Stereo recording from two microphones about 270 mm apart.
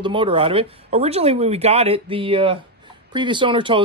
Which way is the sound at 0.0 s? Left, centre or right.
Centre.